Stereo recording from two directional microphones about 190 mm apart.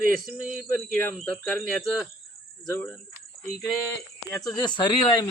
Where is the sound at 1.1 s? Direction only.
5° left (ahead or behind).